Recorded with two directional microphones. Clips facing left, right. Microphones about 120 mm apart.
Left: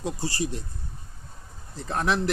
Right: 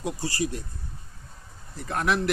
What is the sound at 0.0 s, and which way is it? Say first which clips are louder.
Speech: even; 30° left (ahead or behind).